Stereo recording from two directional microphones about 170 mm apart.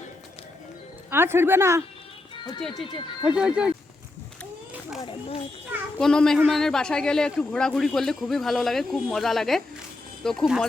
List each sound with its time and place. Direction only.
1.1 s speech: 15° right (ahead or behind)
2.6 s speech: centre (ahead or behind)
6.0 s speech: 5° left (ahead or behind)